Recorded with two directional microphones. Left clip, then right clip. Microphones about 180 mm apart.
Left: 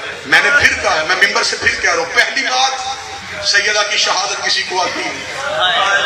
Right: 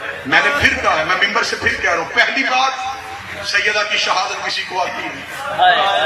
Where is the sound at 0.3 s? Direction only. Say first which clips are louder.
Left 3 dB; centre (ahead or behind).